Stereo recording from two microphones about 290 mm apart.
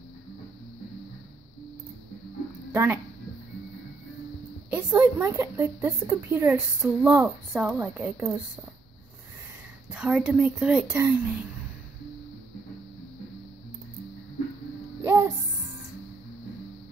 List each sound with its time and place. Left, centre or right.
2.7 s speech: centre
4.6 s speech: centre
9.8 s speech: centre
15.0 s music: centre